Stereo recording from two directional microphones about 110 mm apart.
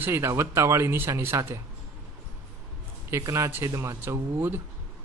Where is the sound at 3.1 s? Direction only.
25° right (ahead or behind).